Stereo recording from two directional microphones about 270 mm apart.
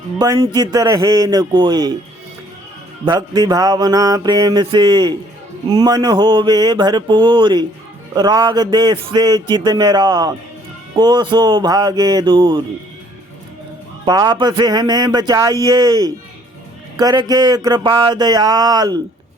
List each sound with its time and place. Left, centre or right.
0.2 s speech: centre
3.1 s speech: centre
14.0 s speech: centre